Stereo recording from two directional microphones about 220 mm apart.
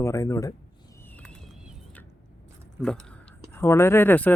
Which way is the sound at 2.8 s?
5° left (ahead or behind).